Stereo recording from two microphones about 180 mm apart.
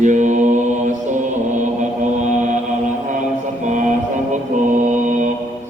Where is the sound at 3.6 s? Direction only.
45° right (ahead or behind).